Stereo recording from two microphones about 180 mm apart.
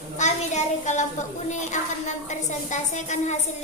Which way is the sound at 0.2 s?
40° left (ahead or behind).